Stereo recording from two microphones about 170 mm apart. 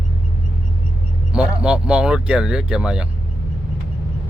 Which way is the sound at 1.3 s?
5° right (ahead or behind).